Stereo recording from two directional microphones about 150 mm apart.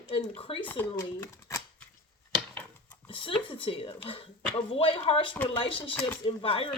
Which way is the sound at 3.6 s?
35° left (ahead or behind).